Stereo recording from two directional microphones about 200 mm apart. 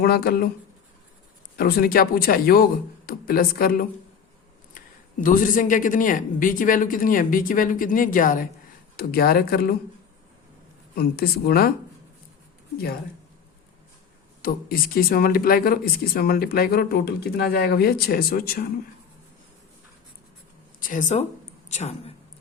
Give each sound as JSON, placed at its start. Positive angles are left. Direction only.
{"t": 0.0, "sound": "speech", "side_deg": 50}
{"t": 1.5, "sound": "speech", "side_deg": 50}
{"t": 4.8, "sound": "a sound", "side_deg": 45}
{"t": 5.2, "sound": "speech", "side_deg": 40}
{"t": 10.9, "sound": "speech", "side_deg": 50}
{"t": 12.7, "sound": "speech", "side_deg": 50}
{"t": 14.4, "sound": "speech", "side_deg": 50}
{"t": 20.7, "sound": "speech", "side_deg": 40}